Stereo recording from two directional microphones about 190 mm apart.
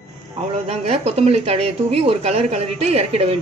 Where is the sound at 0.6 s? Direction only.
35° right (ahead or behind).